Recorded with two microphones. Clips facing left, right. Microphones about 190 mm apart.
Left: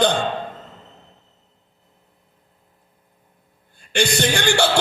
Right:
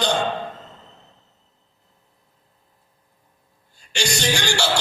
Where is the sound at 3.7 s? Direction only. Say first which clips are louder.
Left 6 dB; 55° left (ahead or behind).